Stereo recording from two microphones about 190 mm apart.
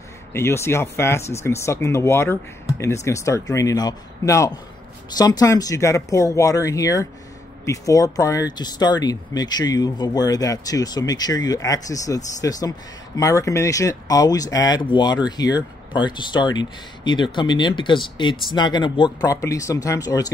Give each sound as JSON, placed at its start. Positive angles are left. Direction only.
{"t": 0.3, "sound": "speech", "side_deg": 15}